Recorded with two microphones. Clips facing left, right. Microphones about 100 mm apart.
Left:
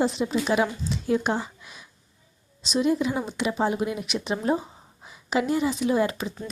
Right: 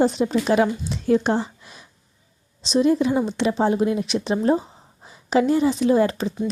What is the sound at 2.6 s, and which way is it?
Speech, 35° right (ahead or behind).